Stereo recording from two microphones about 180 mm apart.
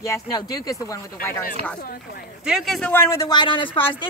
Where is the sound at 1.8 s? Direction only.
55° left (ahead or behind).